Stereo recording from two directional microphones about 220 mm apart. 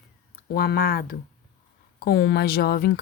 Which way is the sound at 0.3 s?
45° left (ahead or behind).